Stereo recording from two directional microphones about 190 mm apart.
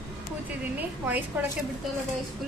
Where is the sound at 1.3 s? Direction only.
10° right (ahead or behind).